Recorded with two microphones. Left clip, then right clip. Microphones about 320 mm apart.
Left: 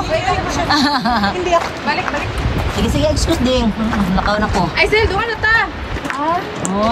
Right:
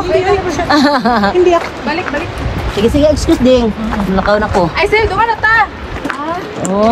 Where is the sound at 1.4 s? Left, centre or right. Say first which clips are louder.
Right 5 dB; left.